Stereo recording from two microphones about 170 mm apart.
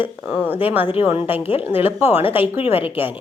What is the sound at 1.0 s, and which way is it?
Speech, 35° left (ahead or behind).